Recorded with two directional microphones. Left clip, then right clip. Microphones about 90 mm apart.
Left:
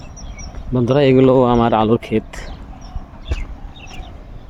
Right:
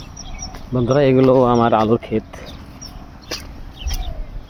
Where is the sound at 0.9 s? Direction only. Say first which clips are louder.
Left 1 dB; 50° left (ahead or behind).